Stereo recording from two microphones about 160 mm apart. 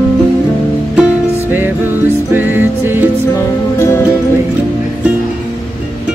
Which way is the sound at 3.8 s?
15° left (ahead or behind).